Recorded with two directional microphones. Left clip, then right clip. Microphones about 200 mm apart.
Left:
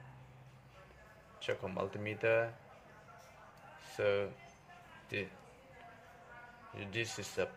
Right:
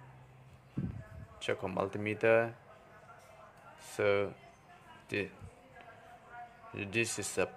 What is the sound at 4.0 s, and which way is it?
Speech, 25° right (ahead or behind).